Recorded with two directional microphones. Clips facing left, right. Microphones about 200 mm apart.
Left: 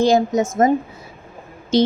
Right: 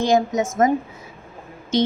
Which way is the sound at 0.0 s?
35° left (ahead or behind).